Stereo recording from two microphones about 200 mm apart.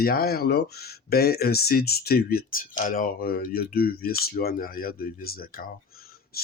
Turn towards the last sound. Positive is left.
turn(degrees=45)  # may be behind; listen again after turning